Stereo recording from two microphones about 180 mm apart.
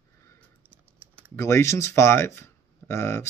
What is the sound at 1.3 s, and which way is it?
Speech, 15° left (ahead or behind).